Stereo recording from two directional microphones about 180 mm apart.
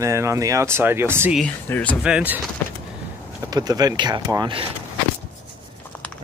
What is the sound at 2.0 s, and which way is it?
Speech, 5° right (ahead or behind).